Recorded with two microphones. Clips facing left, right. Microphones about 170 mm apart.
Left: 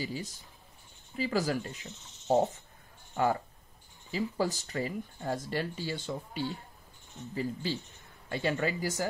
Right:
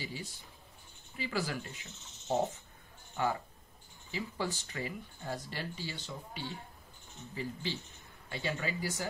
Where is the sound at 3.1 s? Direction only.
45° left (ahead or behind).